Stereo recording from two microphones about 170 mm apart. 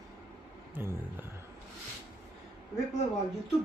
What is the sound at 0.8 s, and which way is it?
Speech, 10° right (ahead or behind).